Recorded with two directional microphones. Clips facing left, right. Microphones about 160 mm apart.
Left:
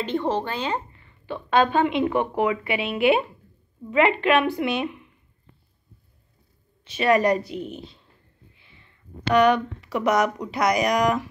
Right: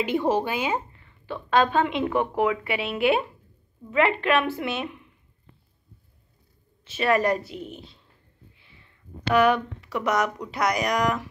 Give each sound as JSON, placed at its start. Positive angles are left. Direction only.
{"t": 0.0, "sound": "speech", "side_deg": -10}
{"t": 1.2, "sound": "a woman's voice", "side_deg": 10}
{"t": 2.8, "sound": "a woman's voice", "side_deg": 15}
{"t": 7.0, "sound": "a woman's voice", "side_deg": 15}
{"t": 9.3, "sound": "speech", "side_deg": -5}
{"t": 9.8, "sound": "a woman's voice", "side_deg": 15}
{"t": 10.5, "sound": "speech", "side_deg": 0}